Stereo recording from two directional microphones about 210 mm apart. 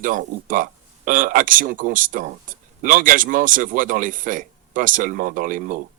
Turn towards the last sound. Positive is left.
turn(degrees=-40)  # may be behind; listen again after turning